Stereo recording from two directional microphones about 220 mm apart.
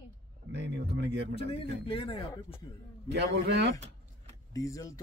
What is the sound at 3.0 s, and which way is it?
Speech, 50° right (ahead or behind).